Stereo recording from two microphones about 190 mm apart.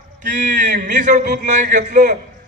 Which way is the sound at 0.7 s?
40° right (ahead or behind).